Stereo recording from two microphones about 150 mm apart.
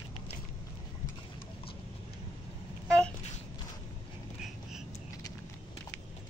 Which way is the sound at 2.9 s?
5° left (ahead or behind).